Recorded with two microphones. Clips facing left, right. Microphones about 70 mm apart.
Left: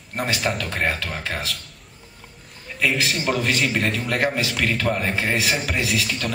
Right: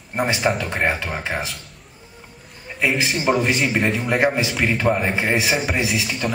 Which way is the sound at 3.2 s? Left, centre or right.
Centre.